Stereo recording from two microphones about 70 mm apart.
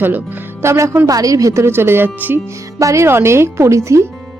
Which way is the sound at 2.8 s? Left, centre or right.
Right.